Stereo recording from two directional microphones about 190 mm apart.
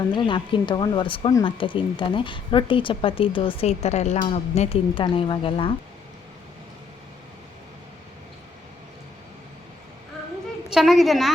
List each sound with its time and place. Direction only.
0.1 s speech: 25° left (ahead or behind)
10.7 s a woman's voice: centre (ahead or behind)